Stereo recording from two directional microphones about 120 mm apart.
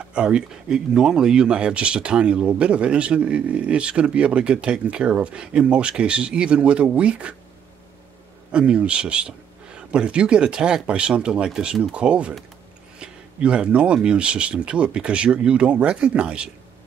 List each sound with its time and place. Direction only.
0.0 s speech: 10° right (ahead or behind)
8.5 s speech: 10° right (ahead or behind)